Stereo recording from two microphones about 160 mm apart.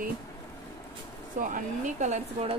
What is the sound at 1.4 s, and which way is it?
Speech, 50° right (ahead or behind).